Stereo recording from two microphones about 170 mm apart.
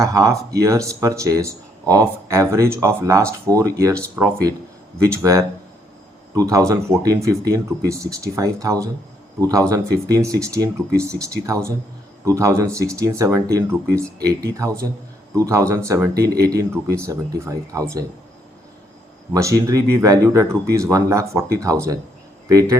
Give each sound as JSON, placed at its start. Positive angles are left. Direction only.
{"t": 0.0, "sound": "speech", "side_deg": -20}
{"t": 19.3, "sound": "speech", "side_deg": -20}